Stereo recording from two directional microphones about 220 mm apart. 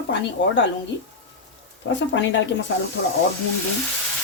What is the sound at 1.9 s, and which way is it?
Speech, 55° left (ahead or behind).